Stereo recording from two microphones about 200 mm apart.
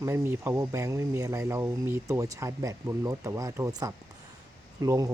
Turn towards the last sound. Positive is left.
turn(degrees=-15)  # may be behind; listen again after turning